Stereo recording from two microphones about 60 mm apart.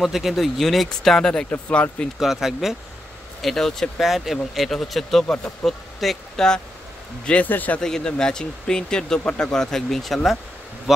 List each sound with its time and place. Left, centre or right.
0.0 s speech: centre
2.1 s speech: centre
3.4 s speech: centre
5.3 s speech: centre
5.7 s speech: centre
7.4 s speech: left
7.8 s speech: centre